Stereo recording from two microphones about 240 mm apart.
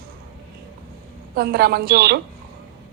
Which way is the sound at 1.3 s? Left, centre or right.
Right.